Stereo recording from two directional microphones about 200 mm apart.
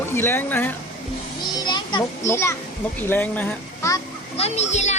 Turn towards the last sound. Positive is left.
turn(degrees=35)  # may be behind; listen again after turning